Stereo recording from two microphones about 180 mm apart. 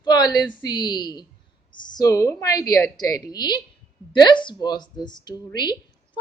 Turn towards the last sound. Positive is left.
turn(degrees=25)  # may be behind; listen again after turning